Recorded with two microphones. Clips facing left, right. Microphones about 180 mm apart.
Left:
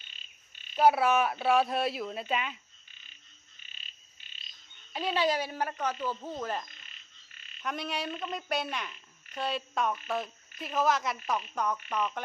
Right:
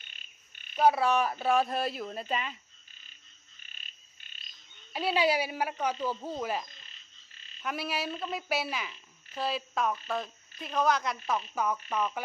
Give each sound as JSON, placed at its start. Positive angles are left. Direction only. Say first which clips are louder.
{"t": 0.1, "sound": "frog", "louder": "right 1 dB", "side_deg": -55}
{"t": 0.8, "sound": "a woman's voice", "louder": "left 1 dB", "side_deg": 5}
{"t": 3.7, "sound": "frog", "louder": "even", "side_deg": -50}
{"t": 4.9, "sound": "frog", "louder": "right 2 dB", "side_deg": -10}
{"t": 7.6, "sound": "a woman's voice", "louder": "right 1 dB", "side_deg": -5}